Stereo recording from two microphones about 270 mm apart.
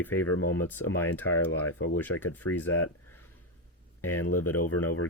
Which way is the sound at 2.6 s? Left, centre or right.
Left.